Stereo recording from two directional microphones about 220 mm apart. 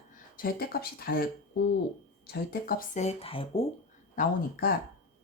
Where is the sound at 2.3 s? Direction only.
45° left (ahead or behind); by 3.6 s 25° left (ahead or behind).